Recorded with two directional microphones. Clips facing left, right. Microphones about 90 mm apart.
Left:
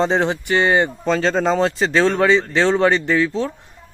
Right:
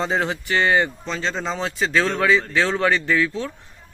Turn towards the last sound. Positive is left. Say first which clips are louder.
# left 3 dB
turn(degrees=25)  # may be behind; listen again after turning